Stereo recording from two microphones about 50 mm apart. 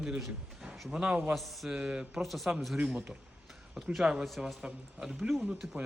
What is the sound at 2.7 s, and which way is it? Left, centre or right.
A man's voice, centre.